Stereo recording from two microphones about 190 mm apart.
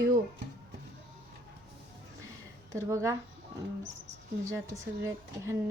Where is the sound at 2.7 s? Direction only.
15° right (ahead or behind).